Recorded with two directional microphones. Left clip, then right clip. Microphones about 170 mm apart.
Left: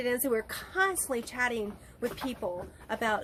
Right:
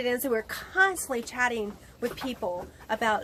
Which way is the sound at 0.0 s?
10° left (ahead or behind).